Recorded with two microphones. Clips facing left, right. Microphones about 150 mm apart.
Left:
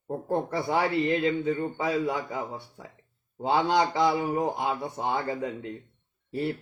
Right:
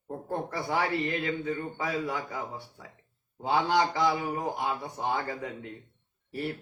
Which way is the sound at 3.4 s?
25° left (ahead or behind).